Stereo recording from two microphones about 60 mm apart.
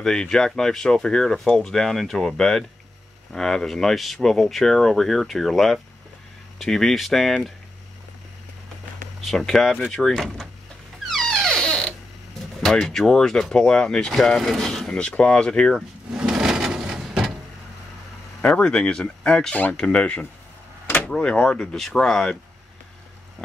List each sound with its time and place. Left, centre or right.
0.0 s speech: centre
9.2 s speech: centre
11.1 s a sound: centre
12.6 s speech: centre
15.0 s speech: centre
16.1 s wood: centre
18.4 s speech: centre
19.5 s speech: left; by 22.3 s centre